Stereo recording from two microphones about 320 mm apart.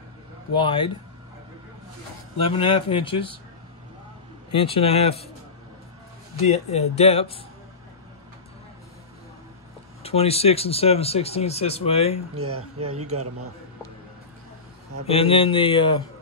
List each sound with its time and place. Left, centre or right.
0.6 s speech: centre
2.4 s speech: centre
4.5 s speech: centre
6.4 s speech: centre
10.0 s speech: centre
12.4 s a man's voice: right
15.0 s speech: centre